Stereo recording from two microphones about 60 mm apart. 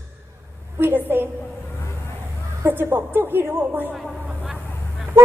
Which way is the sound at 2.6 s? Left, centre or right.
Right.